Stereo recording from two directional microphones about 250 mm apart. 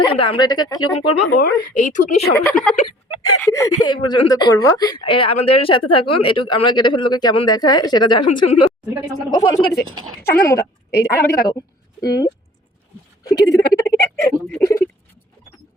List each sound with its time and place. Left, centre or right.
0.0 s speech: left
1.4 s a woman's voice: left
2.5 s a woman's voice: centre